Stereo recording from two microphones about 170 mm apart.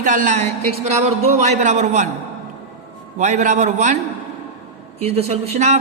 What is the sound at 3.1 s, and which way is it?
Speech, 45° right (ahead or behind).